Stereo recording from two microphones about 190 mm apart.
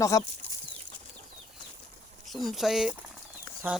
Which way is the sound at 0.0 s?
15° left (ahead or behind).